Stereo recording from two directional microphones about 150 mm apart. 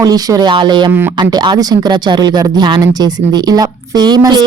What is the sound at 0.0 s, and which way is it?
A woman's voice, 25° right (ahead or behind).